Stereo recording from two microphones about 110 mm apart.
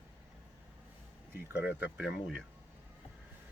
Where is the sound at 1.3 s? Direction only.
15° right (ahead or behind).